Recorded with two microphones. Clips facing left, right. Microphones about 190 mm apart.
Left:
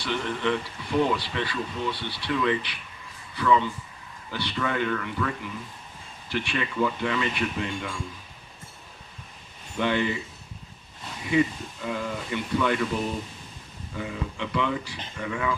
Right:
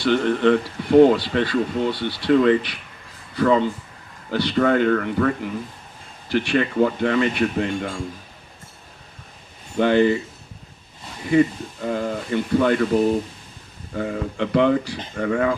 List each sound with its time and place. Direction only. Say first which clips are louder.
0.0 s speech: right 10 dB; 65° right (ahead or behind); by 8.0 s 45° right (ahead or behind)
9.7 s speech: right 9 dB; 45° right (ahead or behind)
11.3 s speech: right 6 dB; 45° right (ahead or behind)